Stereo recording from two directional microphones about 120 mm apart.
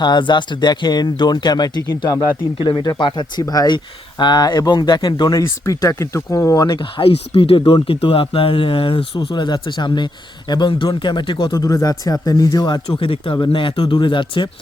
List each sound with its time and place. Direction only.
0.0 s speech: 40° left (ahead or behind)
2.6 s speech: 40° left (ahead or behind)
5.4 s speech: 25° left (ahead or behind)
6.9 s speech: 50° left (ahead or behind)
11.5 s speech: 30° left (ahead or behind)